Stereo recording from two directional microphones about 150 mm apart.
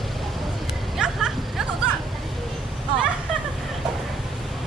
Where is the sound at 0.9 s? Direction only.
5° right (ahead or behind).